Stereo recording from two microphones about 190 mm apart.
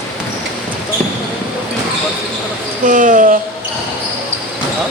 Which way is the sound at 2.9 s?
45° right (ahead or behind).